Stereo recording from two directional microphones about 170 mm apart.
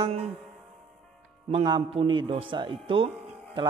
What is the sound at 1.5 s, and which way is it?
A man's voice, 30° right (ahead or behind).